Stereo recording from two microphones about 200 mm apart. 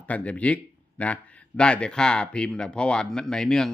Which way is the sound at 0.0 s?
5° left (ahead or behind).